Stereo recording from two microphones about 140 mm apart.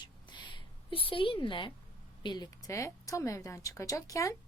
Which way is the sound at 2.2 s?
30° left (ahead or behind).